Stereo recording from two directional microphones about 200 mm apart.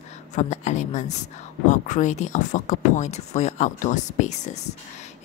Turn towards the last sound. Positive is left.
turn(degrees=35)  # may be behind; listen again after turning